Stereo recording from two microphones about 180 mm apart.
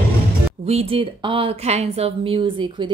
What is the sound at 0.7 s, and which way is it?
Speech, 35° right (ahead or behind).